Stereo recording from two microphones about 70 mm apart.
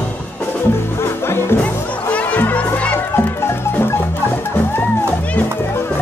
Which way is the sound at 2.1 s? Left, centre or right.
Left.